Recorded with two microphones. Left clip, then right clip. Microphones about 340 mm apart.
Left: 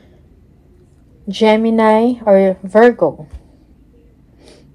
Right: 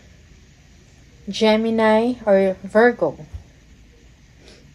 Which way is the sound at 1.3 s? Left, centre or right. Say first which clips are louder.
Left 5 dB; left.